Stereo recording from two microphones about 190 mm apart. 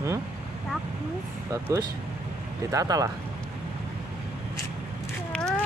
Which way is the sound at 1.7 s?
20° right (ahead or behind).